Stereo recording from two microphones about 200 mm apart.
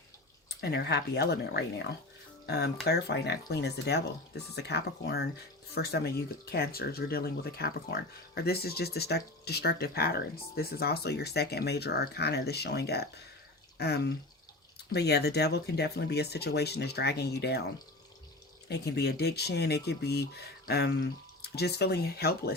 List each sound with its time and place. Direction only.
0.4 s speech: 55° left (ahead or behind)
2.8 s speech: 55° left (ahead or behind)
18.7 s speech: 55° left (ahead or behind)